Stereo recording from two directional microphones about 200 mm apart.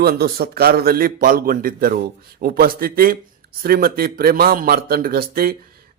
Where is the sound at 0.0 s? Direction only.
50° right (ahead or behind).